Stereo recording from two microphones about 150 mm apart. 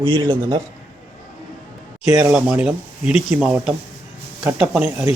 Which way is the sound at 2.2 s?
15° right (ahead or behind).